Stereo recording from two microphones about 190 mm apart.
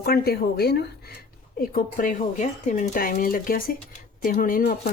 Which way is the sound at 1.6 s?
45° left (ahead or behind).